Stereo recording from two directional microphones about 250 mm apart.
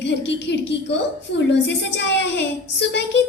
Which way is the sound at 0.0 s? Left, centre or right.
Left.